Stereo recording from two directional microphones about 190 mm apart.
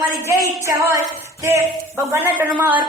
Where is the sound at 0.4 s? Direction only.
15° right (ahead or behind).